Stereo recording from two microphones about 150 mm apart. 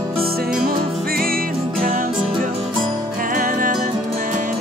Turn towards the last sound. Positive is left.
turn(degrees=-65)  # may be behind; listen again after turning